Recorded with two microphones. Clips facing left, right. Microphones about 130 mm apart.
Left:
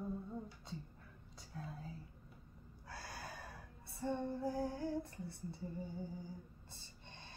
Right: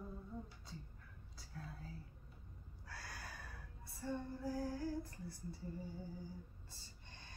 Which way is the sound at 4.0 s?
25° left (ahead or behind).